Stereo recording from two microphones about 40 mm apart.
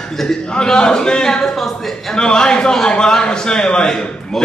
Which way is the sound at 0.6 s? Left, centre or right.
Centre.